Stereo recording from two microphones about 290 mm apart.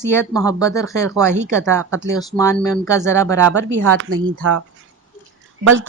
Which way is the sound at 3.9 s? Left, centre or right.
Right.